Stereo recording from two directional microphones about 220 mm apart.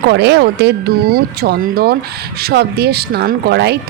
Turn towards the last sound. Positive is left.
turn(degrees=-50)  # may be behind; listen again after turning